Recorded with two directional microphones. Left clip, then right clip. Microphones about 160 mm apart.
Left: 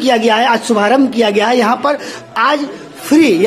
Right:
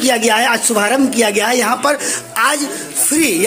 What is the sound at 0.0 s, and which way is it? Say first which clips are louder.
A man's voice: left 2 dB; 20° left (ahead or behind).